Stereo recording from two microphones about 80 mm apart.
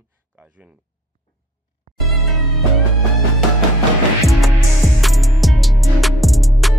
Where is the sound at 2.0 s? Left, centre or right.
Centre.